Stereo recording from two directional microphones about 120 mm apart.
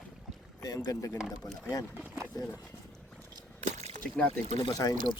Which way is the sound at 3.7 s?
75° right (ahead or behind).